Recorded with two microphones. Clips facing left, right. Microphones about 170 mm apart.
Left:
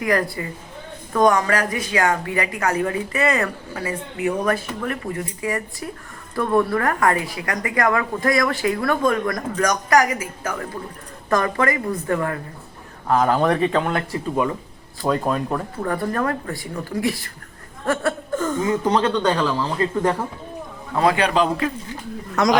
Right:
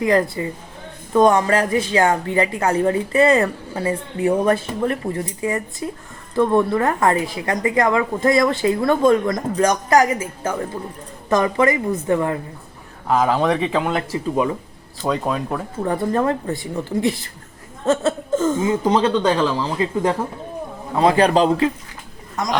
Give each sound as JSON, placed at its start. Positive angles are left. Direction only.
{"t": 0.0, "sound": "speech", "side_deg": -25}
{"t": 13.1, "sound": "speech", "side_deg": 0}
{"t": 13.9, "sound": "speech", "side_deg": -20}
{"t": 15.0, "sound": "speech", "side_deg": 0}
{"t": 15.8, "sound": "speech", "side_deg": -20}
{"t": 17.8, "sound": "a sound", "side_deg": -20}
{"t": 18.9, "sound": "a man's voice", "side_deg": -15}
{"t": 20.9, "sound": "speech", "side_deg": -25}
{"t": 21.2, "sound": "a man's voice", "side_deg": -40}
{"t": 22.4, "sound": "speech", "side_deg": 75}